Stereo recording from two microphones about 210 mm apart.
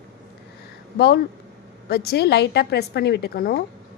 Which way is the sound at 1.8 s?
50° left (ahead or behind).